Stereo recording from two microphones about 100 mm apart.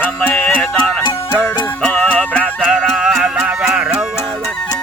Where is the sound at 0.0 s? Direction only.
15° left (ahead or behind).